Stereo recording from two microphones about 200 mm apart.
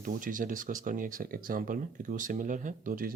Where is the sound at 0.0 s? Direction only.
40° right (ahead or behind).